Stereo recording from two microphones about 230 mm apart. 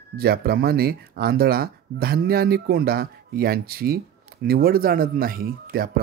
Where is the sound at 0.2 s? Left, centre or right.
Right.